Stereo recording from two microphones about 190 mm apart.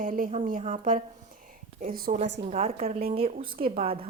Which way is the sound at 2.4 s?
35° right (ahead or behind).